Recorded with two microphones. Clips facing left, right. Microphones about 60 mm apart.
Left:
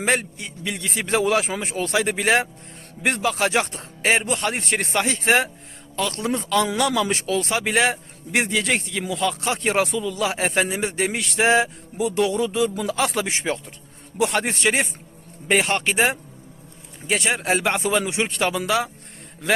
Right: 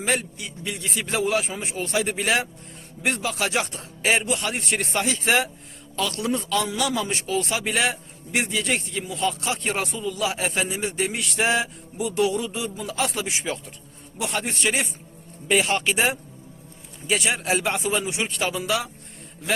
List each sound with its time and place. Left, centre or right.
0.0 s a man's voice: left
6.6 s a man's voice: left